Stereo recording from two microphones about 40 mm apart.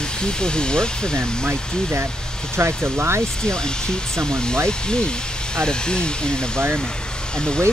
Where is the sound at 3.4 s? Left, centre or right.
Centre.